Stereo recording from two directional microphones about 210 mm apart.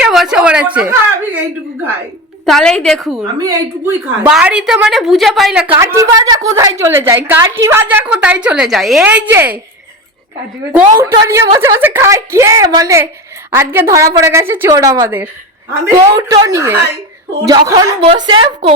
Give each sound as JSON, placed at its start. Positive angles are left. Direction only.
{"t": 0.0, "sound": "a woman's voice", "side_deg": 0}
{"t": 2.5, "sound": "a woman's voice", "side_deg": 5}
{"t": 3.3, "sound": "a woman's voice", "side_deg": -15}
{"t": 5.8, "sound": "a woman's voice", "side_deg": -15}
{"t": 10.8, "sound": "a woman's voice", "side_deg": -15}